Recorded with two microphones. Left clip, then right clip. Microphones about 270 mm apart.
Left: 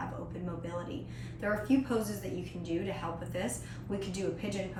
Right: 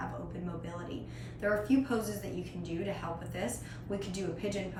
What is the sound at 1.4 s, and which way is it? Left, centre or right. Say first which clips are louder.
A woman's voice: right 1 dB; centre.